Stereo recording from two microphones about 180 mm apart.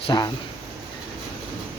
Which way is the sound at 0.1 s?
20° left (ahead or behind).